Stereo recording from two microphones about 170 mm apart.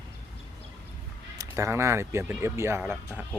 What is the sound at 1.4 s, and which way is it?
Speech, 15° right (ahead or behind).